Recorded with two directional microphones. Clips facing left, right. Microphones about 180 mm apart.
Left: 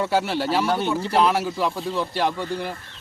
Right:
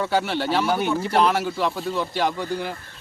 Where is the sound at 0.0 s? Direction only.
5° left (ahead or behind).